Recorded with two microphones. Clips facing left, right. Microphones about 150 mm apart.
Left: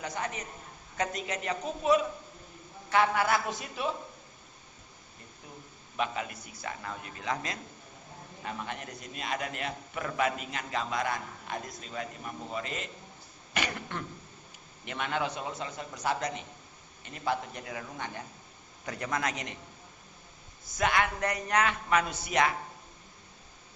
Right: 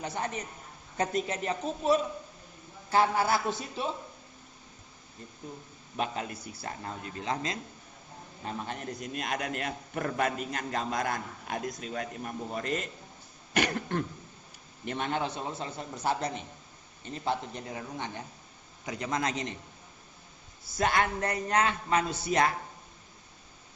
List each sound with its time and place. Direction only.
0.0 s a man's voice: 30° right (ahead or behind)
6.0 s a man's voice: 40° right (ahead or behind)
9.1 s a man's voice: 50° right (ahead or behind); by 19.5 s 30° right (ahead or behind)
20.7 s a man's voice: 35° right (ahead or behind)